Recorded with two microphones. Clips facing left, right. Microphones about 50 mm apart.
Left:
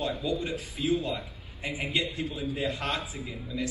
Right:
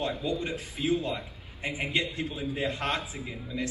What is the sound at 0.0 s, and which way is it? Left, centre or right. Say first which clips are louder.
A man's voice: even; right.